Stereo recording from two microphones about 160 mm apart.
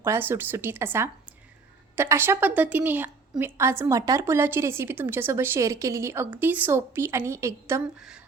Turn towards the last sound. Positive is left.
turn(degrees=-15)  # may be behind; listen again after turning